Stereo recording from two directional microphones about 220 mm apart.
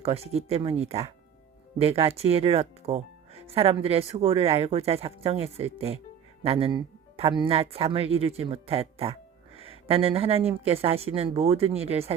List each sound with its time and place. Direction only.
0.0 s speech: 25° right (ahead or behind)